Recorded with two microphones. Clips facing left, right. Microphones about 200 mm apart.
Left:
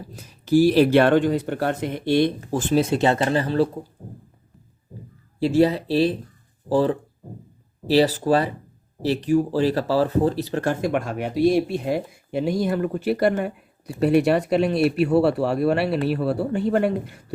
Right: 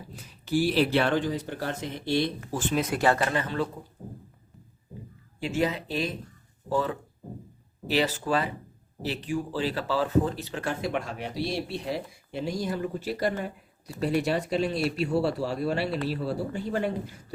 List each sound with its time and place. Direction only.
0.2 s speech: 40° left (ahead or behind); by 2.3 s 60° left (ahead or behind)
2.5 s speech: 40° left (ahead or behind)
2.8 s speech: 25° left (ahead or behind)
5.4 s speech: 35° left (ahead or behind); by 17.2 s 65° left (ahead or behind)